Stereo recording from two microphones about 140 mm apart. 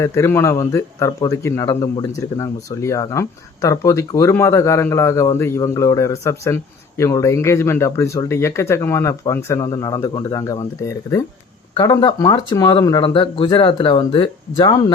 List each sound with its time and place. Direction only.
0.0 s speech: 20° left (ahead or behind)
13.0 s speech: 40° left (ahead or behind)